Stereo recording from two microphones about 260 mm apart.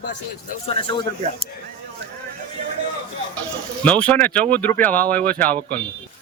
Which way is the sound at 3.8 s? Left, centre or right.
Centre.